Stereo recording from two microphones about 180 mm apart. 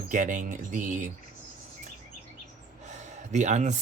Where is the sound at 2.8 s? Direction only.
40° right (ahead or behind).